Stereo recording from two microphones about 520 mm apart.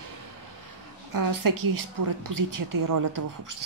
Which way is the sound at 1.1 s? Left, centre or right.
Right.